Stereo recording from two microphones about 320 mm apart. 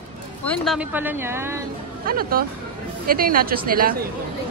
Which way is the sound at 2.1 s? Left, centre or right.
Right.